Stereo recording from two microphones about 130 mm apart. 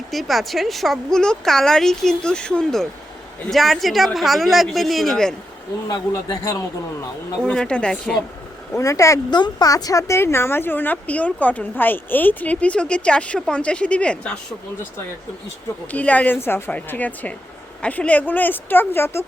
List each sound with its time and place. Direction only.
0.1 s speech: centre (ahead or behind)
5.9 s a man's voice: 25° left (ahead or behind)
7.4 s speech: 5° left (ahead or behind)
8.7 s speech: 25° left (ahead or behind); by 14.3 s 10° left (ahead or behind)
15.9 s speech: 10° left (ahead or behind)